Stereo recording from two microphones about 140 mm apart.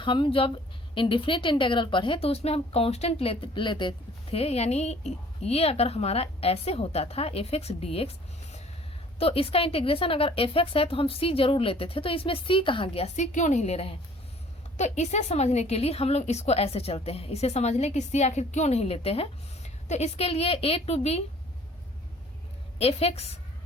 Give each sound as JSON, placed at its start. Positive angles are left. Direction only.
{"t": 0.0, "sound": "speech", "side_deg": 35}
{"t": 9.1, "sound": "speech", "side_deg": 45}
{"t": 13.1, "sound": "a woman's voice", "side_deg": 60}
{"t": 22.8, "sound": "speech", "side_deg": 45}